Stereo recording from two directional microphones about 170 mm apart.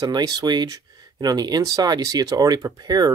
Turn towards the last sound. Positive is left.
turn(degrees=-25)  # may be behind; listen again after turning